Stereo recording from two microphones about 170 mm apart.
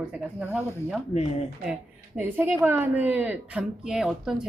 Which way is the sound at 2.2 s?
10° right (ahead or behind).